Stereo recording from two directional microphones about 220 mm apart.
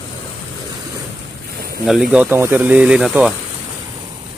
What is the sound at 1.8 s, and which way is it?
Speech, centre (ahead or behind).